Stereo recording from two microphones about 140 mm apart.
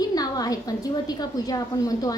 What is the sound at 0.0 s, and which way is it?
A woman's voice, 25° left (ahead or behind).